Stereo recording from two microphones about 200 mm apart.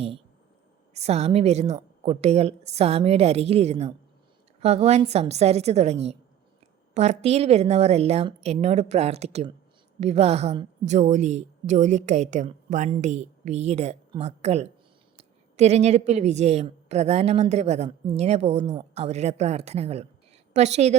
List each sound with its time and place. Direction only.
0.9 s a woman's voice: 30° right (ahead or behind)